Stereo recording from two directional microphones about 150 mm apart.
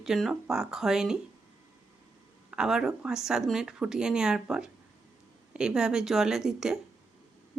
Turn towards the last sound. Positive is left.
turn(degrees=-5)  # may be behind; listen again after turning